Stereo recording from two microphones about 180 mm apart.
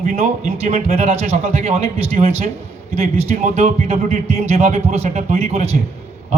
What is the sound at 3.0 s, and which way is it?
A man's voice, 40° right (ahead or behind).